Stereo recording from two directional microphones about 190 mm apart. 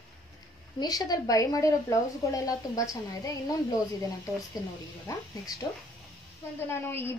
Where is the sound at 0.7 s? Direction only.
20° left (ahead or behind).